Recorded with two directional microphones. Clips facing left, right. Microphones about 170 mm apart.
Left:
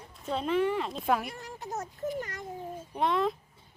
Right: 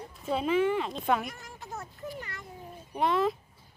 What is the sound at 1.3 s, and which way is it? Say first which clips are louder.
Speech: left 2 dB; 35° left (ahead or behind).